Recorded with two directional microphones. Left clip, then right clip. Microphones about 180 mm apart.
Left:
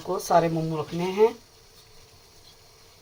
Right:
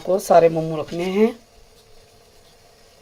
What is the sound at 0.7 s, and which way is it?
Speech, 60° right (ahead or behind).